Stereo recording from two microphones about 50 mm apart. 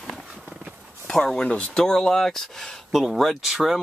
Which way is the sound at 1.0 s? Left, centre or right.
Centre.